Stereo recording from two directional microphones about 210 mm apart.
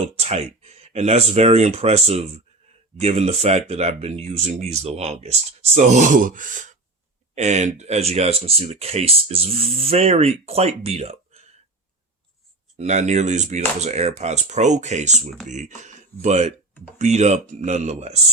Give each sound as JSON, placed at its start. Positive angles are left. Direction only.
{"t": 0.0, "sound": "speech", "side_deg": -30}
{"t": 12.7, "sound": "speech", "side_deg": -30}